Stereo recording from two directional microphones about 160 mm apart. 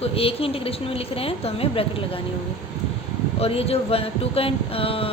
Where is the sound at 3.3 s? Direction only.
40° left (ahead or behind).